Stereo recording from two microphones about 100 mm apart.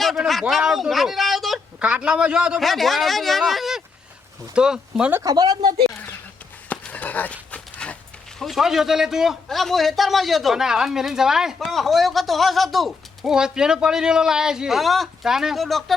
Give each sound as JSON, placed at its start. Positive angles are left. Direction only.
{"t": 0.0, "sound": "a sound", "side_deg": 0}
{"t": 1.8, "sound": "a man's voice", "side_deg": -10}
{"t": 5.2, "sound": "speech", "side_deg": -40}
{"t": 6.7, "sound": "a sound", "side_deg": 15}
{"t": 7.5, "sound": "dog", "side_deg": 15}
{"t": 8.4, "sound": "a man's voice", "side_deg": 0}